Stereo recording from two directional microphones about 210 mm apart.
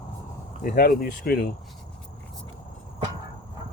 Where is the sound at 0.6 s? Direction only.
45° left (ahead or behind).